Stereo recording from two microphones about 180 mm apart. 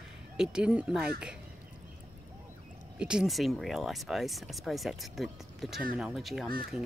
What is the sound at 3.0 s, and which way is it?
Speech, 5° right (ahead or behind).